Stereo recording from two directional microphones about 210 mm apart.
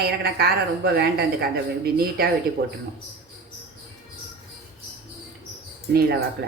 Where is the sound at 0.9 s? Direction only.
50° right (ahead or behind).